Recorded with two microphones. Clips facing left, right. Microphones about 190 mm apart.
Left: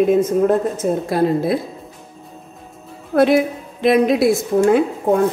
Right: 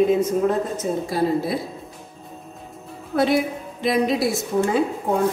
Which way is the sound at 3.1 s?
55° left (ahead or behind).